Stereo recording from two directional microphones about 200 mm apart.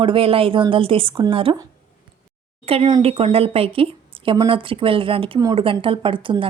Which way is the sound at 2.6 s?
30° right (ahead or behind).